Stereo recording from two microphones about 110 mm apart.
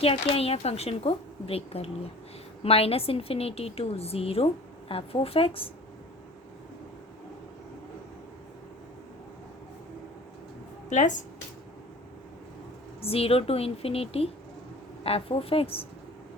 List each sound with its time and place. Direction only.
0.0 s a woman's voice: 60° left (ahead or behind)
13.0 s a woman's voice: 60° left (ahead or behind)